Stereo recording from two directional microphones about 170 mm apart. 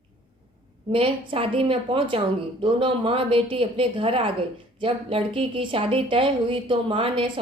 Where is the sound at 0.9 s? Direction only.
30° right (ahead or behind).